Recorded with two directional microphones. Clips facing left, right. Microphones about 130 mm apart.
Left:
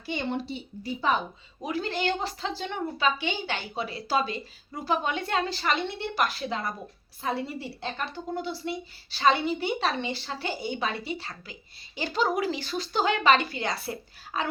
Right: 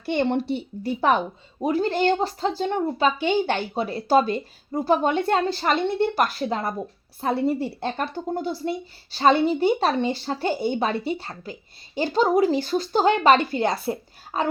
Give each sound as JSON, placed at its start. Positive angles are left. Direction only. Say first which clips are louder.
{"t": 0.0, "sound": "a woman's voice", "louder": "right 8 dB", "side_deg": -65}
{"t": 1.6, "sound": "a woman's voice", "louder": "right 8 dB", "side_deg": -45}